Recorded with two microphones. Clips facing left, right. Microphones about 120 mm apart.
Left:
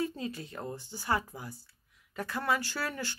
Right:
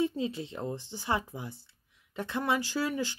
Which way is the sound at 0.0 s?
20° right (ahead or behind).